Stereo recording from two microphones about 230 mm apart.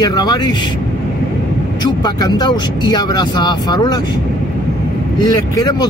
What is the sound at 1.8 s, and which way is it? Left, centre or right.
Speech, centre.